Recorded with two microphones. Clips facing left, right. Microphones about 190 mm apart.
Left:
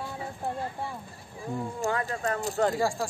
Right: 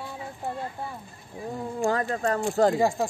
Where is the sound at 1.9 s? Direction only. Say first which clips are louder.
Right 4 dB; 35° right (ahead or behind).